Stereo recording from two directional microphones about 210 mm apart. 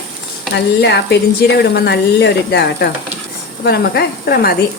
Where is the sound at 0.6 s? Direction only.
55° left (ahead or behind).